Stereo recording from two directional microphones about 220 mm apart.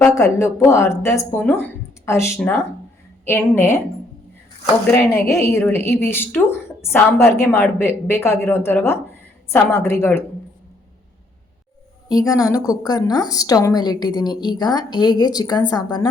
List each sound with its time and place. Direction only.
0.0 s a woman's voice: 15° left (ahead or behind)
4.9 s a woman's voice: 10° left (ahead or behind)
12.0 s a woman's voice: 15° left (ahead or behind)